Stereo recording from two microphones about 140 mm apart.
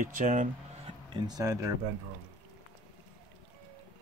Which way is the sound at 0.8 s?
40° right (ahead or behind).